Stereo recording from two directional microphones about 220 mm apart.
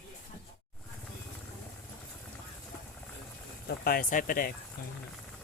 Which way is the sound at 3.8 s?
40° left (ahead or behind).